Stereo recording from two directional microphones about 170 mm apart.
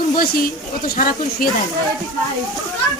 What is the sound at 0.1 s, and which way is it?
Speech, 60° left (ahead or behind).